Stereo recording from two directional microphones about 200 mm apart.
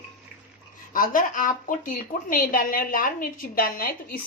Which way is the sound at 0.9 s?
45° left (ahead or behind).